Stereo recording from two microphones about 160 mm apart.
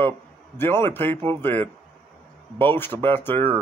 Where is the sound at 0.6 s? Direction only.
15° left (ahead or behind).